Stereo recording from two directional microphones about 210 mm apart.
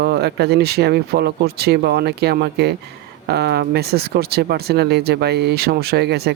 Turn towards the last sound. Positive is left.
turn(degrees=-50)  # may be behind; listen again after turning